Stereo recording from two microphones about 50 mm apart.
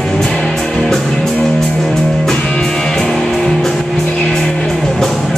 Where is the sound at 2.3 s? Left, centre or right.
Centre.